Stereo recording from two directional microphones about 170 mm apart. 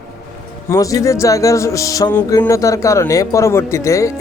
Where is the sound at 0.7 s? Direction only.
20° left (ahead or behind).